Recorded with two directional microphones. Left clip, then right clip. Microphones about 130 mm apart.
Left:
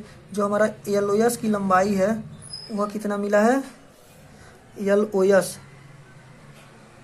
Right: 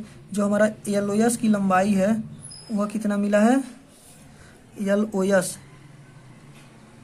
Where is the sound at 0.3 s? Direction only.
25° right (ahead or behind).